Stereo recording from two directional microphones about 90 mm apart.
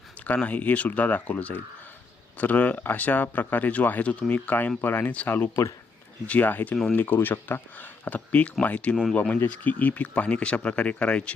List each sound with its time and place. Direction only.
0.3 s speech: 15° left (ahead or behind)